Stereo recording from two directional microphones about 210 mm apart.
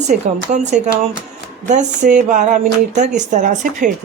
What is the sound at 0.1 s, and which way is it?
Speech, 40° right (ahead or behind).